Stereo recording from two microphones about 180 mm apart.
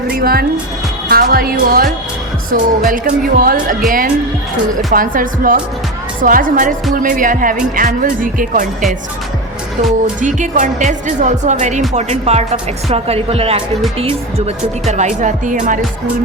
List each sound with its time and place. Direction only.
0.1 s speech: 55° right (ahead or behind)
10.2 s speech: 45° right (ahead or behind)